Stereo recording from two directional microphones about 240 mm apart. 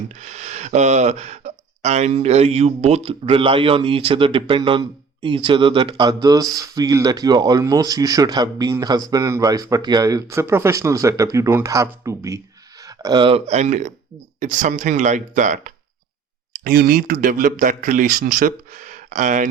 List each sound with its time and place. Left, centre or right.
0.2 s speech: right